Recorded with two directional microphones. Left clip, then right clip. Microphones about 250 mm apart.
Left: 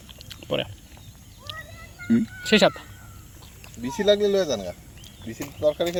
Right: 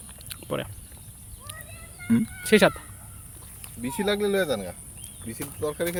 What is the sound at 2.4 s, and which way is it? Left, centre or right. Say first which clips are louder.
Speech: even; centre.